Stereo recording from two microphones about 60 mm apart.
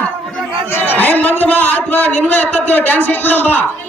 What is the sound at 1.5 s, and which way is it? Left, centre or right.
A man's voice, left.